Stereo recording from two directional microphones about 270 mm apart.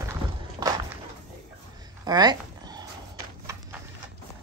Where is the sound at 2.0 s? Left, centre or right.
Centre.